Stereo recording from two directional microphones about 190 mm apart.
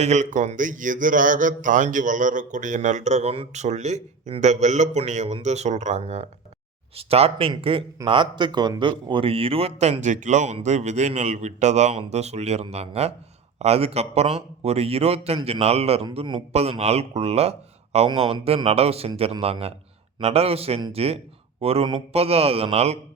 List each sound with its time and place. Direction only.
0.0 s speech: 40° right (ahead or behind)